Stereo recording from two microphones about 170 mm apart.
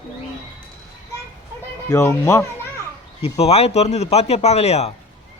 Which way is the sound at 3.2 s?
35° left (ahead or behind).